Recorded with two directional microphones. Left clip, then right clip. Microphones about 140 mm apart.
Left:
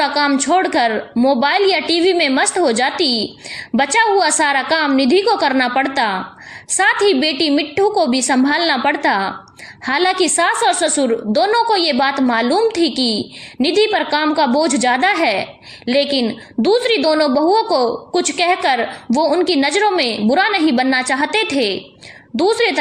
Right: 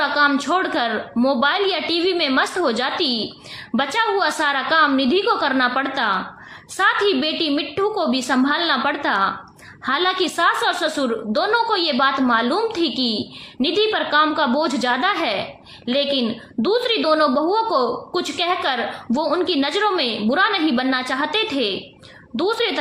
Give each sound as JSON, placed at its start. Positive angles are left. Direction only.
{"t": 0.0, "sound": "a woman's voice", "side_deg": 40}